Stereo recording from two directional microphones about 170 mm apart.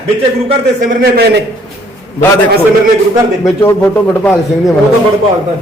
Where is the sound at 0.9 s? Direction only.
65° right (ahead or behind).